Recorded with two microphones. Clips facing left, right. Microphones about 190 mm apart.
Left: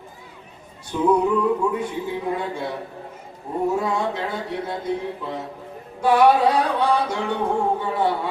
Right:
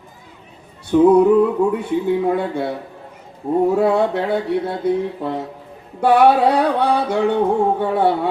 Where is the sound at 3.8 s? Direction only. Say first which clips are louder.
Right 8 dB; 60° right (ahead or behind).